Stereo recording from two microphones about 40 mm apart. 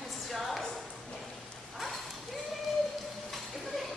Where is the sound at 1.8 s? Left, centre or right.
Centre.